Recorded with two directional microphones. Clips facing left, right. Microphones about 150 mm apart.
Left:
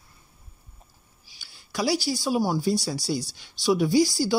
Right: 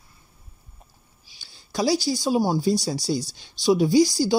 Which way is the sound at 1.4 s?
20° right (ahead or behind).